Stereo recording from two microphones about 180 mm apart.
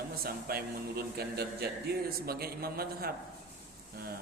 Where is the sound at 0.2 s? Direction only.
55° right (ahead or behind).